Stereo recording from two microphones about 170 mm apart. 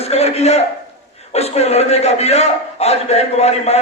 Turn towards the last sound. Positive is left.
turn(degrees=40)  # may be behind; listen again after turning